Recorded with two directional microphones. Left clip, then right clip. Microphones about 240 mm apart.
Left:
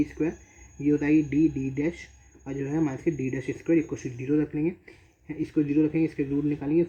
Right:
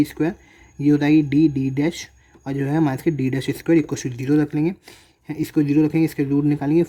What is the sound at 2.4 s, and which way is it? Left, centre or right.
A man's voice, right.